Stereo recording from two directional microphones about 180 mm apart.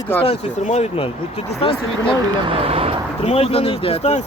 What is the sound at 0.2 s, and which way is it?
Speech, 35° left (ahead or behind).